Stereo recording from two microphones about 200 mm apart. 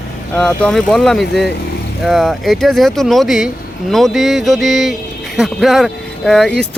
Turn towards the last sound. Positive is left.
turn(degrees=5)  # may be behind; listen again after turning